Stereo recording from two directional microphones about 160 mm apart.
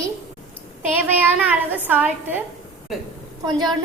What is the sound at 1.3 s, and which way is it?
Speech, 10° right (ahead or behind).